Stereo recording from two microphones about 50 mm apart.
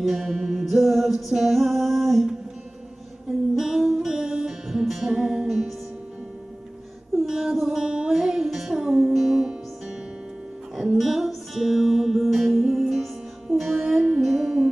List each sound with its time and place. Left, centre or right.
0.1 s music: centre
7.2 s music: centre
11.0 s music: centre